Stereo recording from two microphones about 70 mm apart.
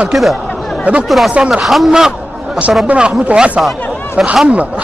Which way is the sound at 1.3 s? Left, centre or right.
Centre.